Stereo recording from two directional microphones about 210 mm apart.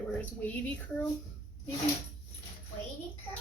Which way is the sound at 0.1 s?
5° left (ahead or behind).